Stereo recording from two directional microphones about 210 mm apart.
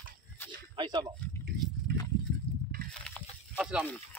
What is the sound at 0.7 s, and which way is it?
Speech, 20° right (ahead or behind).